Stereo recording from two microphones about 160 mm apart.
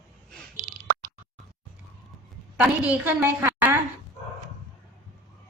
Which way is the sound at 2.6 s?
10° right (ahead or behind).